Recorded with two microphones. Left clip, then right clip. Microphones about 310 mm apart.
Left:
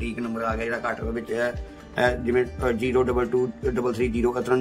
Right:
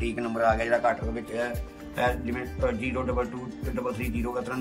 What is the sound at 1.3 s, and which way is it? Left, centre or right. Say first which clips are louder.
Speech: left 4 dB; centre.